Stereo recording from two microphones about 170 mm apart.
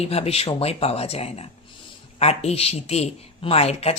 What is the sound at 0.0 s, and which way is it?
A woman's voice, 35° left (ahead or behind).